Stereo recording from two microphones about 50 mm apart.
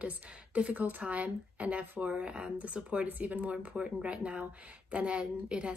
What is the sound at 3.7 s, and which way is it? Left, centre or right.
A woman's voice, centre.